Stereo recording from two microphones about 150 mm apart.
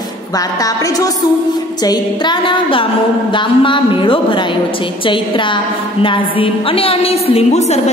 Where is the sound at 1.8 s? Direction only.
30° left (ahead or behind).